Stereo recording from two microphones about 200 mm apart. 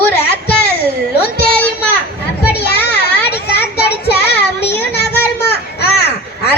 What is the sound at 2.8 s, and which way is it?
Children playing, 55° left (ahead or behind).